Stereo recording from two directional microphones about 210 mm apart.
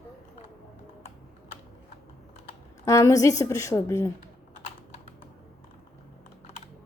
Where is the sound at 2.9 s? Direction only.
15° left (ahead or behind).